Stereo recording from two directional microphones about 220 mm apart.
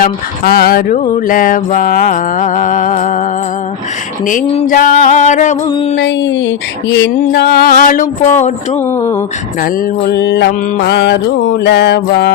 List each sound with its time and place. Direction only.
0.0 s mantra: 45° left (ahead or behind)
4.3 s mantra: 35° left (ahead or behind)
5.6 s music: 25° left (ahead or behind)
6.0 s a sound: 55° left (ahead or behind)
8.4 s mantra: 30° left (ahead or behind)
8.9 s speech: 10° left (ahead or behind)
10.0 s a sound: 50° left (ahead or behind)